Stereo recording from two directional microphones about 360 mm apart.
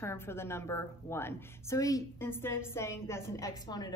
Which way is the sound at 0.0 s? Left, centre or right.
Centre.